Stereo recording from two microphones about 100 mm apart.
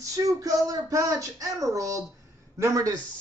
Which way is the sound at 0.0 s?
35° right (ahead or behind).